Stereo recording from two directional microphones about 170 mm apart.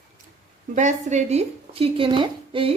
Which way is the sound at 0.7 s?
45° right (ahead or behind).